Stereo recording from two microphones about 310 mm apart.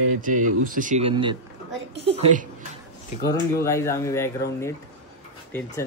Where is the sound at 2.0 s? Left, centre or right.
Centre.